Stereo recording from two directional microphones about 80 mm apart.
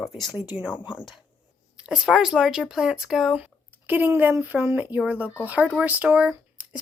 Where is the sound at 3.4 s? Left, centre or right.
Right.